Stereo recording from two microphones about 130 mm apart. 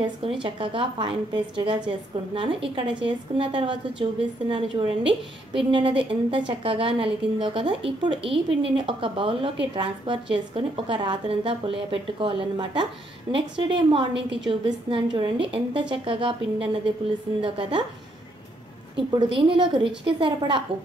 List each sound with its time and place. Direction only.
0.0 s a woman's voice: 40° right (ahead or behind)
18.9 s a woman's voice: 40° right (ahead or behind)